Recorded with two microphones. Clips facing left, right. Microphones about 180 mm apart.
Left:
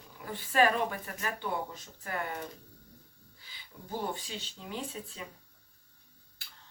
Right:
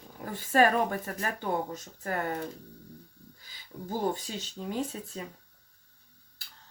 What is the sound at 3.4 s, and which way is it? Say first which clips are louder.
Speech: right 9 dB; 40° right (ahead or behind).